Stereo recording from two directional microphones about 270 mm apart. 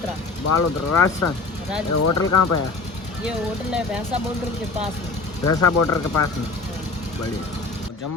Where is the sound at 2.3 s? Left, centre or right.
Left.